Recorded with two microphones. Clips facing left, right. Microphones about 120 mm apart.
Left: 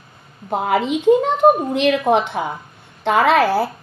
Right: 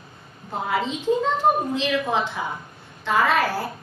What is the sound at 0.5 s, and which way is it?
A woman's voice, 70° left (ahead or behind).